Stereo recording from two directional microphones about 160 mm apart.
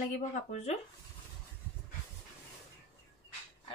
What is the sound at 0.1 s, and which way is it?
Speech, 45° left (ahead or behind).